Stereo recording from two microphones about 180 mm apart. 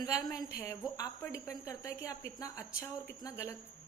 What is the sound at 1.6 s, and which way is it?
A woman's voice, 15° left (ahead or behind).